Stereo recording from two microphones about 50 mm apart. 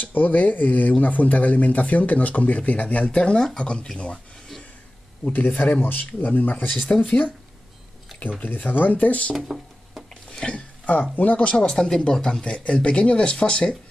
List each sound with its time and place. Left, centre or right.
0.0 s speech: left; by 4.1 s centre
5.2 s speech: left
8.4 s speech: left
9.3 s a sound: centre
10.4 s a sound: left
11.6 s speech: centre